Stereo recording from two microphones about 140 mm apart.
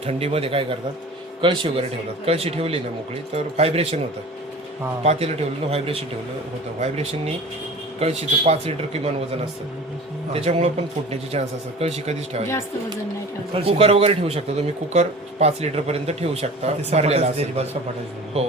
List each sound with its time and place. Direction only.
0.0 s speech: 45° right (ahead or behind)
5.0 s speech: 50° right (ahead or behind)
10.3 s speech: 50° right (ahead or behind)
13.5 s speech: 45° right (ahead or behind)